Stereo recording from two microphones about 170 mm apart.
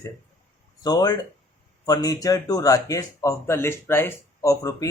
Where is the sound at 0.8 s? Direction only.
20° left (ahead or behind).